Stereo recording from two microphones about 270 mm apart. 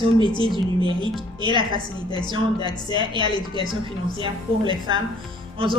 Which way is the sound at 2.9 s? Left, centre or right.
Centre.